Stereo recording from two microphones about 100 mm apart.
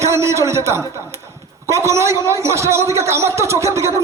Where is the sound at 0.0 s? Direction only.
30° right (ahead or behind).